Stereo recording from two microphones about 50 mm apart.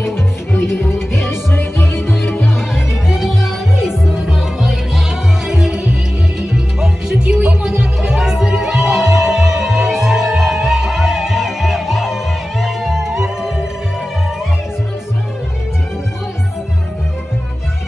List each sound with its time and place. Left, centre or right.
0.7 s music: left
2.9 s music: centre